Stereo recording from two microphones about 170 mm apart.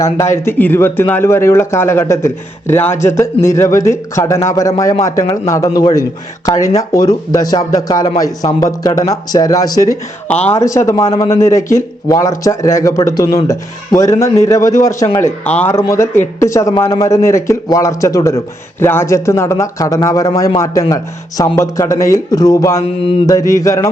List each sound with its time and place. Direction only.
0.0 s speech: 15° left (ahead or behind)
8.9 s speech: 35° left (ahead or behind)
9.3 s speech: 20° left (ahead or behind)